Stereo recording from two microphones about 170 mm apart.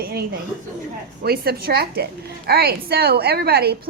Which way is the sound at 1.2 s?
65° right (ahead or behind).